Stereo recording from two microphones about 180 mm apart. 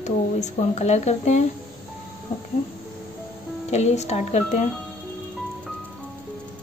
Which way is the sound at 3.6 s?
40° left (ahead or behind).